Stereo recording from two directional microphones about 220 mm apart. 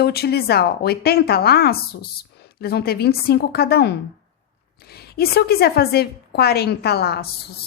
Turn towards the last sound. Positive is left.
turn(degrees=45)  # may be behind; listen again after turning